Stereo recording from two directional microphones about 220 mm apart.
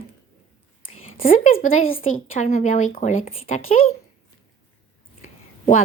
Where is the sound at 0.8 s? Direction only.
40° left (ahead or behind).